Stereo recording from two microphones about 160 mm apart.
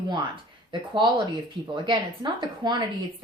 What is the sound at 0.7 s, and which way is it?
Speech, 25° right (ahead or behind).